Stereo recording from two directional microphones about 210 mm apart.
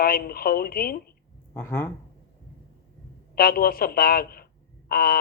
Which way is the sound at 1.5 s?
10° left (ahead or behind).